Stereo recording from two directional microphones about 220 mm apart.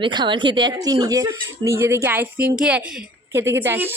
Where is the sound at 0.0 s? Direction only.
20° right (ahead or behind).